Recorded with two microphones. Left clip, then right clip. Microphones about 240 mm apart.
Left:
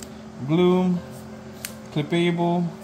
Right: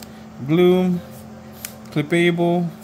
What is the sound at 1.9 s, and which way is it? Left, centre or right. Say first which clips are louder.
Speech: right 5 dB; right.